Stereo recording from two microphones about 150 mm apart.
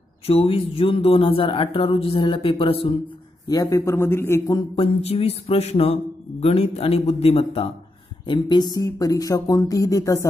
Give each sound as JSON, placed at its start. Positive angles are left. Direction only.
{"t": 0.3, "sound": "speech", "side_deg": 40}
{"t": 3.4, "sound": "speech", "side_deg": 25}
{"t": 4.6, "sound": "speech", "side_deg": 35}
{"t": 8.3, "sound": "speech", "side_deg": 30}